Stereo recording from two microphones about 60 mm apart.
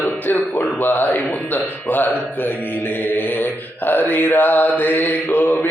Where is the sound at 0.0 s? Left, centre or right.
Left.